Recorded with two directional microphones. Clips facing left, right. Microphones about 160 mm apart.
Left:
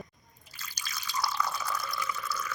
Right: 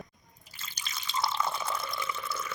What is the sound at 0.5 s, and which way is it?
Water, 25° right (ahead or behind).